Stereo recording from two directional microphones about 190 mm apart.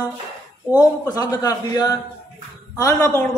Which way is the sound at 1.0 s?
20° left (ahead or behind).